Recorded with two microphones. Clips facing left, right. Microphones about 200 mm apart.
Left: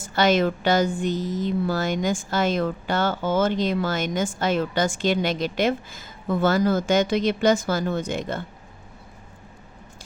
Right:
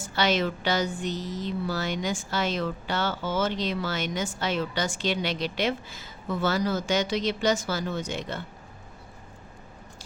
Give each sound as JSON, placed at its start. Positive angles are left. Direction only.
{"t": 0.1, "sound": "a woman's voice", "side_deg": 50}